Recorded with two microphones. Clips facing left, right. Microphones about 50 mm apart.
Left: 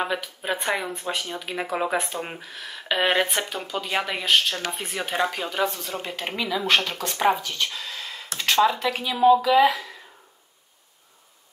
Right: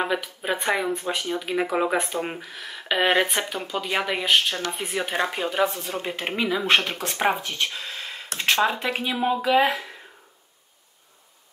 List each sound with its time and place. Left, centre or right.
0.0 s speech: centre; by 9.9 s right